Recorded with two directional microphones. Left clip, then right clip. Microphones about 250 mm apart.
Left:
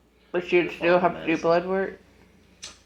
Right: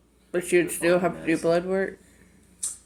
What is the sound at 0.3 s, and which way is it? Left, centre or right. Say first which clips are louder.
Speech: even; right.